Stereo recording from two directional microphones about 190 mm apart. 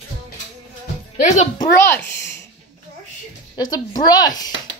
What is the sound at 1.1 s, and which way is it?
Speech, 35° left (ahead or behind).